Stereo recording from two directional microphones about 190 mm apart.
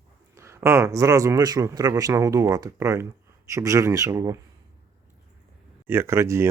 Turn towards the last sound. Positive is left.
turn(degrees=-15)  # may be behind; listen again after turning